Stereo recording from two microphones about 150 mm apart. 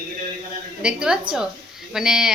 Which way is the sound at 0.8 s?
5° right (ahead or behind).